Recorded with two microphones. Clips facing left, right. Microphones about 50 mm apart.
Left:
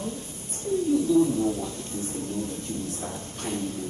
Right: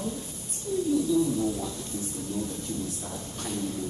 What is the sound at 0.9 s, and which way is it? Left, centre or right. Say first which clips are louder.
Speech: left 4 dB; left.